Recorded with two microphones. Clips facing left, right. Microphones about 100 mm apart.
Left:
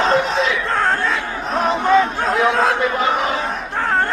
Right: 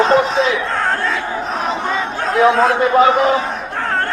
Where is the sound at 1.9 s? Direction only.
Centre (ahead or behind).